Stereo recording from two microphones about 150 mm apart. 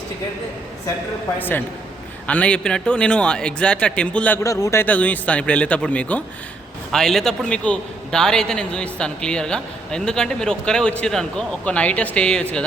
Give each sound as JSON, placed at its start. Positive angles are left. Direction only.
{"t": 1.4, "sound": "a man's voice", "side_deg": 10}
{"t": 4.4, "sound": "a man's voice", "side_deg": 20}